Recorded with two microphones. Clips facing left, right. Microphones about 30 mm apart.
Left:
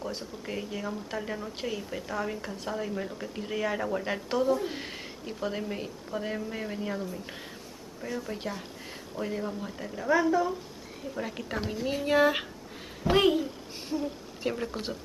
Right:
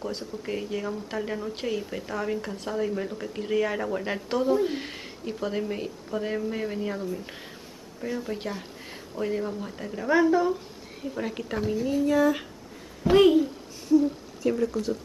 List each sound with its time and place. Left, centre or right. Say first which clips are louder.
0.0 s a woman's voice: right 3 dB; centre
11.1 s a woman's voice: right 3 dB; centre
11.8 s a sound: right 6 dB; left
12.1 s speech: left 1 dB; left
13.0 s speech: right 5 dB; centre
13.8 s a sound: right 11 dB; left
14.6 s speech: right 7 dB; left